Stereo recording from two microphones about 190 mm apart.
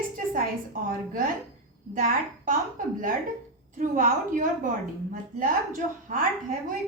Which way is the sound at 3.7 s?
45° right (ahead or behind).